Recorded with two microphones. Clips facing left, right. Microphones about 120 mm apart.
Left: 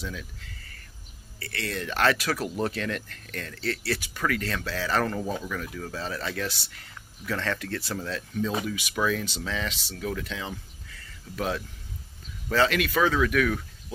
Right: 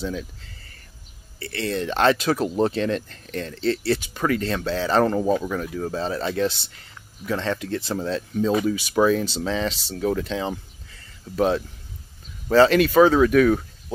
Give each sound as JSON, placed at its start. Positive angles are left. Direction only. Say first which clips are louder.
{"t": 0.0, "sound": "speech", "louder": "right 8 dB", "side_deg": -30}